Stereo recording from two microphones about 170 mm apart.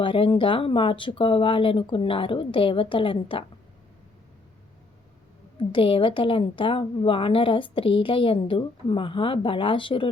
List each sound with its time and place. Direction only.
0.0 s a woman's voice: 30° left (ahead or behind)
5.5 s a woman's voice: 30° left (ahead or behind)